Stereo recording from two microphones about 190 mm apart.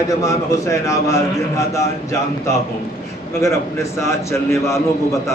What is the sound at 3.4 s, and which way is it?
A man's voice, 15° left (ahead or behind).